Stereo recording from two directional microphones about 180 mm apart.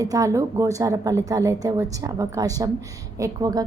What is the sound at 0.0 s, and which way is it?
A woman's voice, 20° right (ahead or behind).